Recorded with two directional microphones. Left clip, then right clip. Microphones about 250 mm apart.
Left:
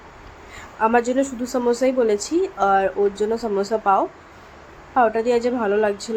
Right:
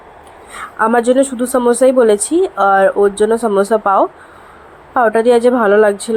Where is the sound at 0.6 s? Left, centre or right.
Right.